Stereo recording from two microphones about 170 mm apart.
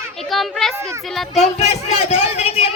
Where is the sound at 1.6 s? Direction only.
40° left (ahead or behind).